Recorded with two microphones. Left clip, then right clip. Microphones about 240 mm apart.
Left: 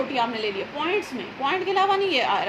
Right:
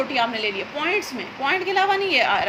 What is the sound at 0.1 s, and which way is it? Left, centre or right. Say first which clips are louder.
A woman's voice: right 3 dB; right.